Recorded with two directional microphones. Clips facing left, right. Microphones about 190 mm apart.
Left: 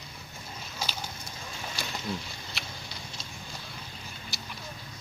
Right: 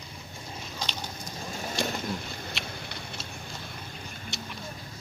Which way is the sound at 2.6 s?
Centre (ahead or behind).